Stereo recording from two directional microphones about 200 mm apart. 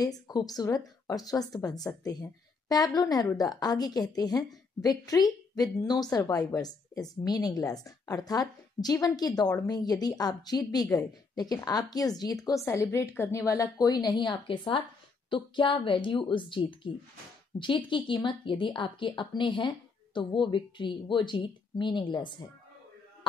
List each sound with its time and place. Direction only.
0.0 s a woman's voice: 20° left (ahead or behind)